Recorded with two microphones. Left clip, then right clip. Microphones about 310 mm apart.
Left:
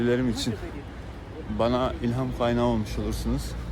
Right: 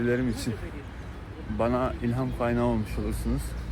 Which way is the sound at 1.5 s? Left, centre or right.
Centre.